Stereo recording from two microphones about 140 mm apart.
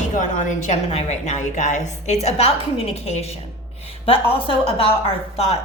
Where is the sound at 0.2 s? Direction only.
65° left (ahead or behind).